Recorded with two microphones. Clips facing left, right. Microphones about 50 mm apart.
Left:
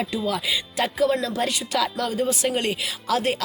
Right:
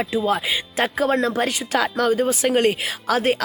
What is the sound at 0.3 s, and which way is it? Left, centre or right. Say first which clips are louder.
Speech: right 4 dB; right.